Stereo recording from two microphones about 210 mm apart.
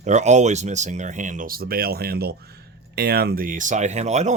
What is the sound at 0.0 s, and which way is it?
Speech, 35° right (ahead or behind).